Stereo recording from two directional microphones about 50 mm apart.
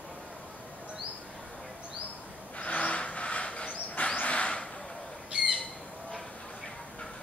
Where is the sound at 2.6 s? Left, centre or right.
Left.